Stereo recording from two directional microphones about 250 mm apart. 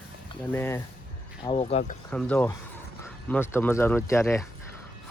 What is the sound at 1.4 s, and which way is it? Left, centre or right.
Speech, left.